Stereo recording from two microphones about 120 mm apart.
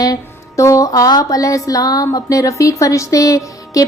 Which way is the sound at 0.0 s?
25° left (ahead or behind).